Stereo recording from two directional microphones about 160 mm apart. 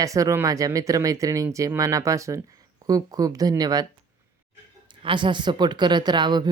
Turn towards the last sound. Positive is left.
turn(degrees=-25)  # may be behind; listen again after turning